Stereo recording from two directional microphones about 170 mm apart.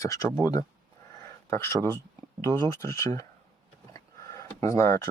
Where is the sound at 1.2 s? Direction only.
15° left (ahead or behind).